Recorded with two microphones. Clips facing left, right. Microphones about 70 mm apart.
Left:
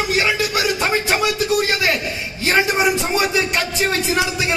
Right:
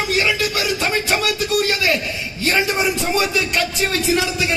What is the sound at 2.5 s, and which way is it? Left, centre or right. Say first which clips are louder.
A man's voice: left 2 dB; left.